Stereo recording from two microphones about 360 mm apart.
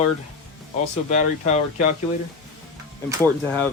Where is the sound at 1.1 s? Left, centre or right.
Centre.